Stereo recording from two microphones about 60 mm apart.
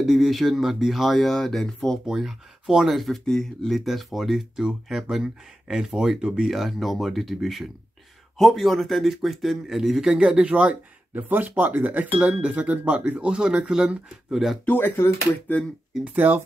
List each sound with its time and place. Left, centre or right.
0.0 s speech: centre
2.0 s a man's voice: centre
3.0 s a man's voice: centre
14.7 s speech: left
16.0 s speech: right